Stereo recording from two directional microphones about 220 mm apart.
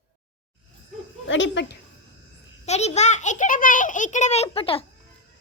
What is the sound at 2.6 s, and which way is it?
A child's voice, 30° left (ahead or behind).